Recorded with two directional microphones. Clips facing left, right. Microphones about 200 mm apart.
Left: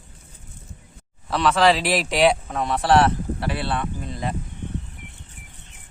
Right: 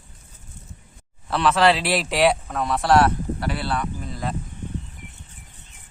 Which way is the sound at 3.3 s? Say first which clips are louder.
Even; 25° left (ahead or behind).